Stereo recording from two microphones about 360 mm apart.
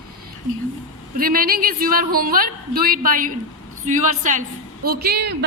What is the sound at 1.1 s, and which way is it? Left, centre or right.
A woman's voice, right.